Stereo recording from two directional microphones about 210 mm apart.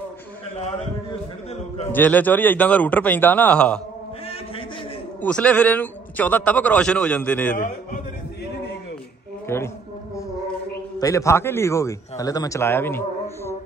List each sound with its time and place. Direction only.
1.9 s a man's voice: 10° left (ahead or behind)
5.2 s a man's voice: 5° left (ahead or behind)
7.5 s a man's voice: 40° left (ahead or behind)
9.5 s a man's voice: 10° left (ahead or behind)
11.0 s a man's voice: 15° left (ahead or behind)